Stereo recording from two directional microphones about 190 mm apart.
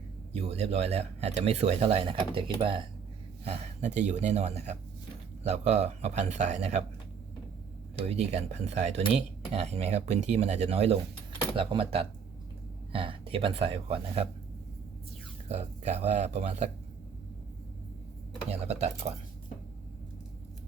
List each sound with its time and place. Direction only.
0.3 s speech: 35° right (ahead or behind)
8.0 s speech: 35° right (ahead or behind)
15.4 s speech: 35° right (ahead or behind)
18.6 s speech: 35° right (ahead or behind)